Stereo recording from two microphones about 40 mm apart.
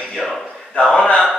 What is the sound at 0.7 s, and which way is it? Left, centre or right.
Speech, left.